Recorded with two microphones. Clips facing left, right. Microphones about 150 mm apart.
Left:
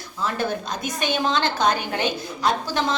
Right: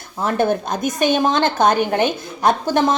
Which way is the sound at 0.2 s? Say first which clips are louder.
Right 7 dB; 50° right (ahead or behind).